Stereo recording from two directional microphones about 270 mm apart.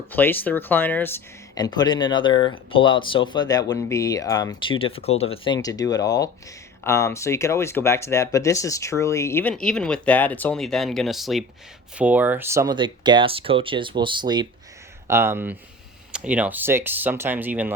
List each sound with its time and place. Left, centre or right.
0.1 s speech: centre